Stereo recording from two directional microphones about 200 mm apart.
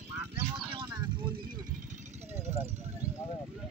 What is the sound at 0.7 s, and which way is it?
Vehicle, 25° right (ahead or behind).